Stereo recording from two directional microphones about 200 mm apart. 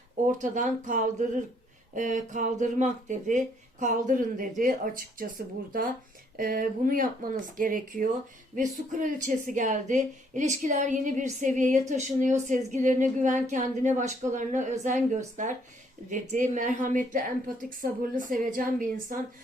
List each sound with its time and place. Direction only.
0.3 s a woman's voice: 40° right (ahead or behind)
6.3 s a woman's voice: 45° right (ahead or behind)
16.3 s a woman's voice: 40° right (ahead or behind)